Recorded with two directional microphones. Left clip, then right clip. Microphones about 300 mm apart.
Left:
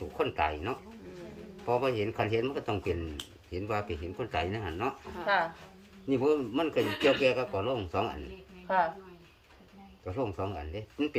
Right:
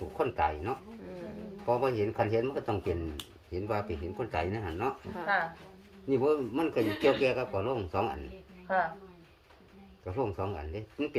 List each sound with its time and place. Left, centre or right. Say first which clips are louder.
0.2 s a man's voice: even; centre
5.2 s speech: left 2 dB; left
6.1 s a man's voice: even; centre
8.6 s a woman's voice: left 2 dB; left
10.1 s a man's voice: right 1 dB; centre